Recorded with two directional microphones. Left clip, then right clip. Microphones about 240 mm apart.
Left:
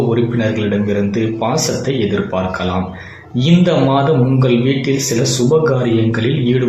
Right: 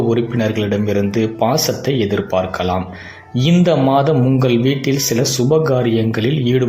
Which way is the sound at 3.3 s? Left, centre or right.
Right.